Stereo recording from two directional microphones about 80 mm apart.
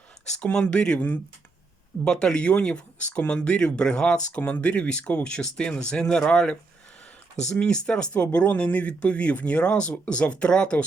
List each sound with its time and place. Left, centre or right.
0.3 s speech: centre